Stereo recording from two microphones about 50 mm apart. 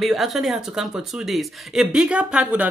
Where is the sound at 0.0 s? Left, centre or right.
Centre.